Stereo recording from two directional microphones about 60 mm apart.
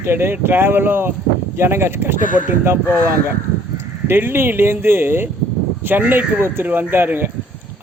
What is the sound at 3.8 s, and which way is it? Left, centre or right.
A man's voice, right.